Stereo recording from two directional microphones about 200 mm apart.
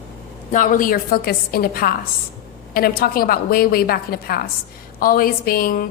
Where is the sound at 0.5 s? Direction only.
40° left (ahead or behind).